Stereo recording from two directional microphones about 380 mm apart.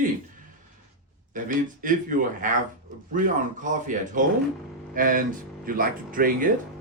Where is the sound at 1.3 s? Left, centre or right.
Right.